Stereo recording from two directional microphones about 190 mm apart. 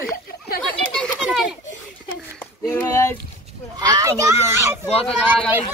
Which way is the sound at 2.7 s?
10° left (ahead or behind).